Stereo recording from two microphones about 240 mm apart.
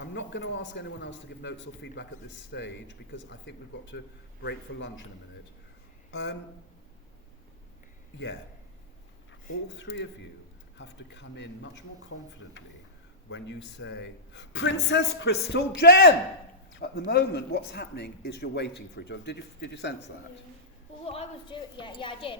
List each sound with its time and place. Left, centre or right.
0.0 s a man's voice: left
6.1 s speech: left
9.7 s a man's voice: left
13.3 s a man's voice: left
21.0 s a woman's voice: left